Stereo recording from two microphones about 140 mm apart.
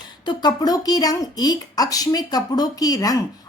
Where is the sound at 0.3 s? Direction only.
30° left (ahead or behind).